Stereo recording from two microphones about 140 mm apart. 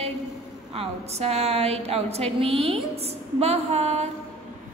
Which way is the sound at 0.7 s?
45° right (ahead or behind).